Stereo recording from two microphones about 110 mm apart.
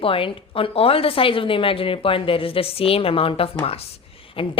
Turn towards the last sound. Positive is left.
turn(degrees=55)  # may be behind; listen again after turning